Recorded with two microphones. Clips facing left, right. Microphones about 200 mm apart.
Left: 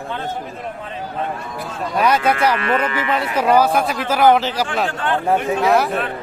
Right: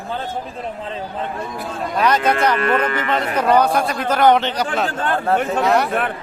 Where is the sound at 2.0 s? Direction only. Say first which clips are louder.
Even; 10° left (ahead or behind).